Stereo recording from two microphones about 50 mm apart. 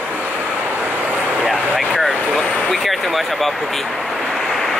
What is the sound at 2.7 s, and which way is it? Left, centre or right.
Speech, centre.